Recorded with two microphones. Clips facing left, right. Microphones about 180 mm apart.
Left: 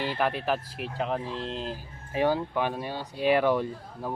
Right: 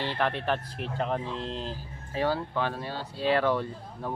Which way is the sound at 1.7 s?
15° left (ahead or behind).